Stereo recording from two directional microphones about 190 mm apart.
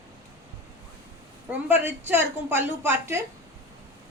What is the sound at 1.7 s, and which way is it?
A woman's voice, 10° right (ahead or behind).